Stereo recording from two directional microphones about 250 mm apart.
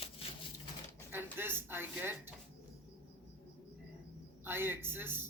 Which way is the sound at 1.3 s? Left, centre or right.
Centre.